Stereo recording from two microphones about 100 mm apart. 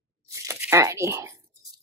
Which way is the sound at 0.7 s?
30° right (ahead or behind).